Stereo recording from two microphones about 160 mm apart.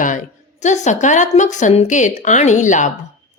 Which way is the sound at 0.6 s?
50° left (ahead or behind).